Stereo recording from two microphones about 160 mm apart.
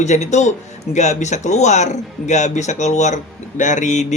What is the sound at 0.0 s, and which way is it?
Speech, 45° left (ahead or behind).